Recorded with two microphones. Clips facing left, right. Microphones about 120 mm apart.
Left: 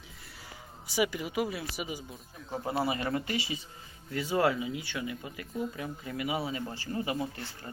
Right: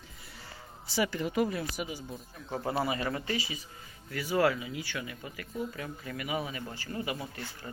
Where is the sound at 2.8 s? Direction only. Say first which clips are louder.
Left 1 dB; 30° left (ahead or behind).